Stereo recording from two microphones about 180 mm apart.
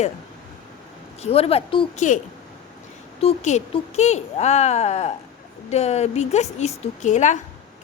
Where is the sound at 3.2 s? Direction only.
35° left (ahead or behind).